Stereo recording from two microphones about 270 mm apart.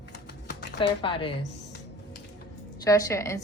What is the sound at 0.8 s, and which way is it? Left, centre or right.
Speech, centre.